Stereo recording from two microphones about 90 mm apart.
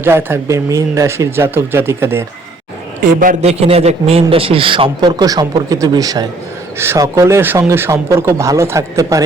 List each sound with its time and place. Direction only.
0.0 s speech: 25° right (ahead or behind)
0.5 s speech: 40° right (ahead or behind)
3.7 s a man's voice: 90° right; by 6.2 s 45° right (ahead or behind)
6.7 s speech: 30° right (ahead or behind)